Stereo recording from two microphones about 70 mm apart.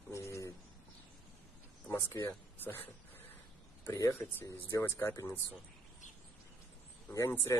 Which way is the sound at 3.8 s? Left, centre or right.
Left.